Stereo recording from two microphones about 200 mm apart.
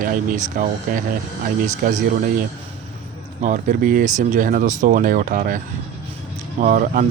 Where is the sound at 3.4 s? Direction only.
40° right (ahead or behind).